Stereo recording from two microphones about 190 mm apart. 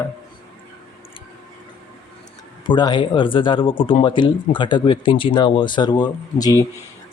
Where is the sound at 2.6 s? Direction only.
20° left (ahead or behind).